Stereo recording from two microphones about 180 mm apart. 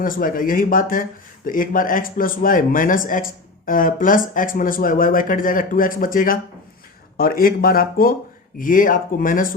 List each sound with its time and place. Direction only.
0.0 s speech: 50° left (ahead or behind)